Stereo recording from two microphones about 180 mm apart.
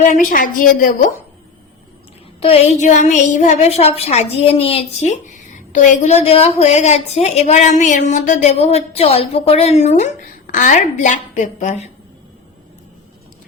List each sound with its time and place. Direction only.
0.0 s a woman's voice: 45° left (ahead or behind)
2.4 s a woman's voice: 35° left (ahead or behind)